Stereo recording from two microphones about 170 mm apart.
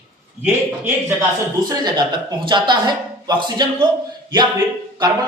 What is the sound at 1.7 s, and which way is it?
A man's voice, 25° right (ahead or behind).